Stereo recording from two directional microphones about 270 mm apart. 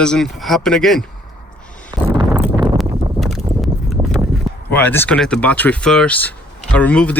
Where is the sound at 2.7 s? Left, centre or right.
Centre.